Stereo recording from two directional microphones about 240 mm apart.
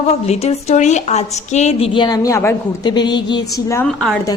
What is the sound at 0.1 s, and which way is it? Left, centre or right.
A woman's voice, left.